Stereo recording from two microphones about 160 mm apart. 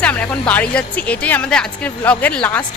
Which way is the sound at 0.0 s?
10° left (ahead or behind).